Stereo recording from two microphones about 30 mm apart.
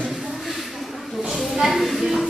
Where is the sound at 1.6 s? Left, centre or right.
Centre.